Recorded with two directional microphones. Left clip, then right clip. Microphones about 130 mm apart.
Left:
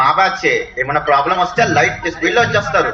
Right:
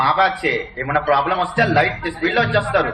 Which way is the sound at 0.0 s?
40° right (ahead or behind).